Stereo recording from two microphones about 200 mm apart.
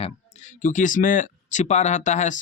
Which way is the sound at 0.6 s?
40° left (ahead or behind).